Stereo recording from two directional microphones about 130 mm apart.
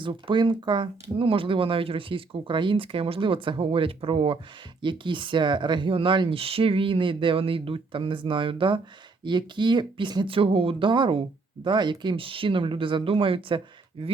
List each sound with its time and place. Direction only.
0.0 s speech: 40° right (ahead or behind)